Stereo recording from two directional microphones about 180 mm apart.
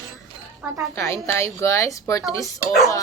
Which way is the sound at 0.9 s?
15° left (ahead or behind).